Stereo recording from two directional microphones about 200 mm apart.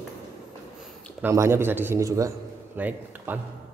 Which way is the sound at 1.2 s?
10° right (ahead or behind).